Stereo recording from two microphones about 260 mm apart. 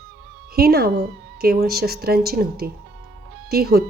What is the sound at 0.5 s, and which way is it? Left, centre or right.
Speech, right.